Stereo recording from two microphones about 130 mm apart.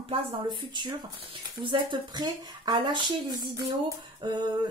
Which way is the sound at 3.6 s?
30° right (ahead or behind).